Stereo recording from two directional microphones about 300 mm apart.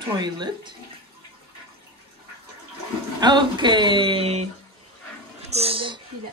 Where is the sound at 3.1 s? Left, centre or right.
Centre.